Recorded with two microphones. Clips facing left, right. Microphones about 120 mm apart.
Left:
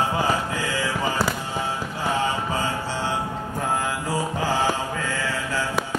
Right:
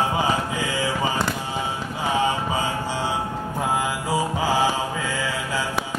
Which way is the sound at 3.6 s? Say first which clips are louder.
Right 1 dB; 10° right (ahead or behind).